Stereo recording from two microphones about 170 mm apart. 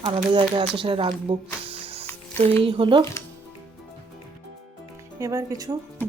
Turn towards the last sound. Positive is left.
turn(degrees=-20)  # may be behind; listen again after turning